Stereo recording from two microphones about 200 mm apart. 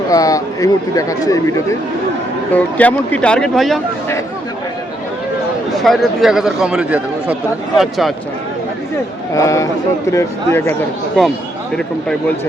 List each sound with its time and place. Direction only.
0.1 s speech: 15° left (ahead or behind)
2.5 s speech: 10° left (ahead or behind)
5.8 s speech: centre (ahead or behind)
9.3 s speech: 15° left (ahead or behind)